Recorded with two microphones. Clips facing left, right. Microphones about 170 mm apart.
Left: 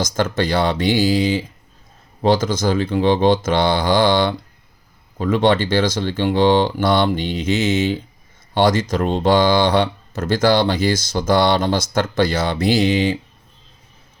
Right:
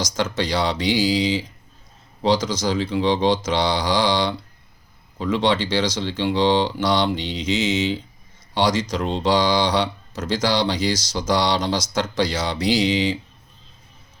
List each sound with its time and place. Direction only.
0.0 s speech: 55° left (ahead or behind)